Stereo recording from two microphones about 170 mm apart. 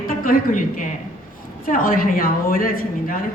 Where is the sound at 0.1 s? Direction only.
50° left (ahead or behind).